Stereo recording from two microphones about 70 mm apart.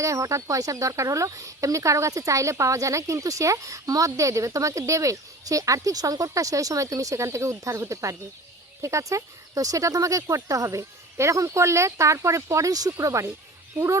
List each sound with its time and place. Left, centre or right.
0.0 s speech: right